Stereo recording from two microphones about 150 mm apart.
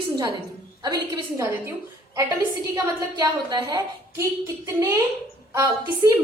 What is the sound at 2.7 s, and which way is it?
A woman's voice, 25° right (ahead or behind).